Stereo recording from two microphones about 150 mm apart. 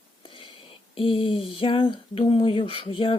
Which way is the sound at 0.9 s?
35° left (ahead or behind).